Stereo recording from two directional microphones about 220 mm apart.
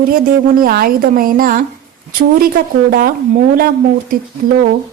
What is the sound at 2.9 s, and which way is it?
A woman's voice, 40° right (ahead or behind).